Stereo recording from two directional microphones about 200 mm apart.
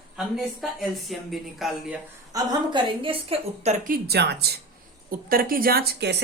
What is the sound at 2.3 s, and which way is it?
A woman's voice, 20° right (ahead or behind).